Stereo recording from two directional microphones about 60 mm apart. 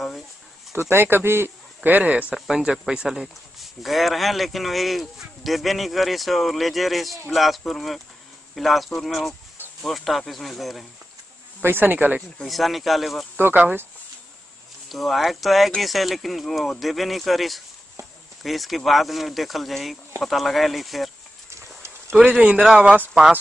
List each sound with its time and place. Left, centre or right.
0.7 s speech: right
1.8 s speech: right
2.3 s speech: centre
11.6 s speech: right
12.4 s speech: centre
13.6 s speech: right
14.9 s speech: centre
21.5 s horse: right
22.1 s speech: centre